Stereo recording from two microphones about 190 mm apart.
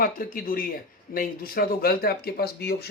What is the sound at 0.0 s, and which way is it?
A man's voice, 50° left (ahead or behind).